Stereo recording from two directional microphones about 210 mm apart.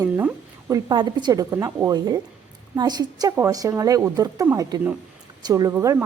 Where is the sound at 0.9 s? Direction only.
20° right (ahead or behind).